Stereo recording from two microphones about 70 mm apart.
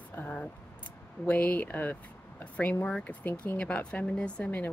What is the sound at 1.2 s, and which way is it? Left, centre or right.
A woman's voice, left.